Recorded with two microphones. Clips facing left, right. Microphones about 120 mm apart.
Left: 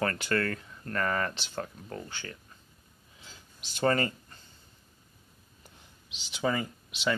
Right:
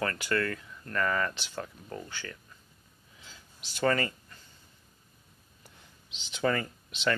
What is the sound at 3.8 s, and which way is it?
Speech, 35° left (ahead or behind).